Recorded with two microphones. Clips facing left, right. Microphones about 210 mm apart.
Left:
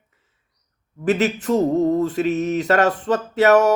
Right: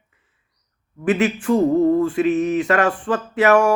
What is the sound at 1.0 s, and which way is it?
Speech, 40° left (ahead or behind).